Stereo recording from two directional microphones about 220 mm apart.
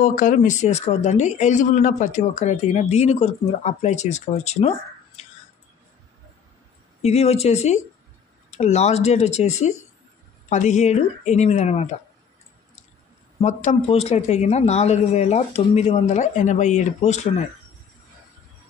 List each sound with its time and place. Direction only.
0.0 s speech: 35° left (ahead or behind)
7.0 s speech: 30° left (ahead or behind)
13.4 s speech: 30° left (ahead or behind)